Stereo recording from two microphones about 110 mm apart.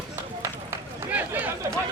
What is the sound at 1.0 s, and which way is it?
Run, 15° right (ahead or behind).